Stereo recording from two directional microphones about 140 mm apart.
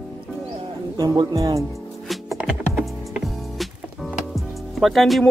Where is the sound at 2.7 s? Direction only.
Centre (ahead or behind).